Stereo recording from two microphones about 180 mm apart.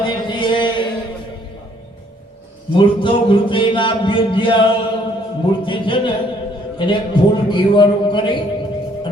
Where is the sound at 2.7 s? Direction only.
25° left (ahead or behind).